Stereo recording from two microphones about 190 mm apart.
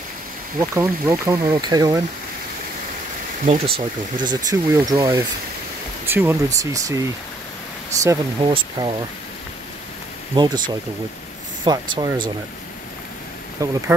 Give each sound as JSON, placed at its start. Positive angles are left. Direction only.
{"t": 0.6, "sound": "speech", "side_deg": -15}
{"t": 3.6, "sound": "speech", "side_deg": -55}
{"t": 4.3, "sound": "speech", "side_deg": -20}
{"t": 6.0, "sound": "speech", "side_deg": -10}
{"t": 8.4, "sound": "speech", "side_deg": -25}
{"t": 10.3, "sound": "speech", "side_deg": -20}
{"t": 13.6, "sound": "speech", "side_deg": -15}